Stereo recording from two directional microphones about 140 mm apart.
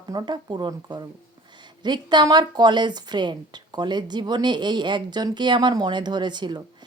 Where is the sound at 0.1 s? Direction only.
30° right (ahead or behind).